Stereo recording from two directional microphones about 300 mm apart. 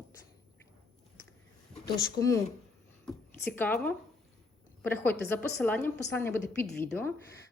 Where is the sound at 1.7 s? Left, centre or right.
Centre.